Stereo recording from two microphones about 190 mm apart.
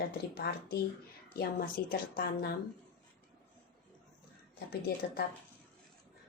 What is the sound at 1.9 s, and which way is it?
Speech, 55° left (ahead or behind).